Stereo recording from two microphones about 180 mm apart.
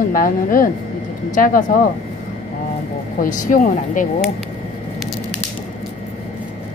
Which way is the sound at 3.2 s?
45° left (ahead or behind).